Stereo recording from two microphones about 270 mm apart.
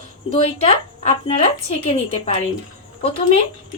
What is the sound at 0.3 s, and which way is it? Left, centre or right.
Speech, left.